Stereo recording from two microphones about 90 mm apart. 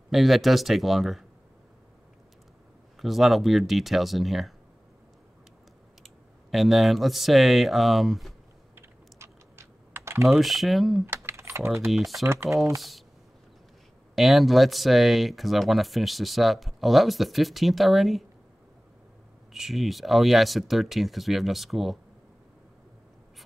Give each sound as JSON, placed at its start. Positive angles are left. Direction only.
{"t": 0.1, "sound": "speech", "side_deg": 0}
{"t": 3.0, "sound": "speech", "side_deg": 0}
{"t": 6.0, "sound": "speech", "side_deg": 0}
{"t": 8.7, "sound": "typing", "side_deg": -30}
{"t": 10.2, "sound": "speech", "side_deg": 0}
{"t": 11.1, "sound": "typing", "side_deg": -30}
{"t": 11.8, "sound": "speech", "side_deg": 0}
{"t": 12.3, "sound": "speech", "side_deg": -30}
{"t": 14.1, "sound": "speech", "side_deg": 0}
{"t": 19.5, "sound": "speech", "side_deg": -5}